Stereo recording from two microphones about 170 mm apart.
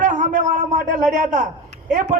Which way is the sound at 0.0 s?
45° right (ahead or behind).